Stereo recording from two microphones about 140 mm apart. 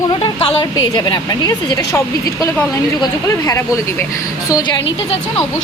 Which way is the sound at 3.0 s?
25° left (ahead or behind).